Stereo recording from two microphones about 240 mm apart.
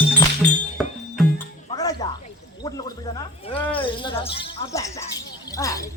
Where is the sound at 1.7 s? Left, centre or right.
Centre.